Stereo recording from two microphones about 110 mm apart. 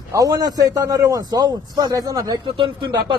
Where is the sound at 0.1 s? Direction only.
30° right (ahead or behind).